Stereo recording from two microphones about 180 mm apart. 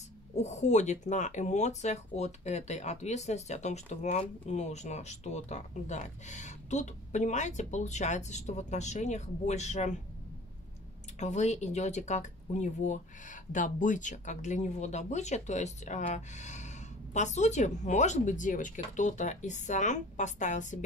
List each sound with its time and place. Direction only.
0.4 s speech: 40° left (ahead or behind)
11.1 s speech: 40° left (ahead or behind)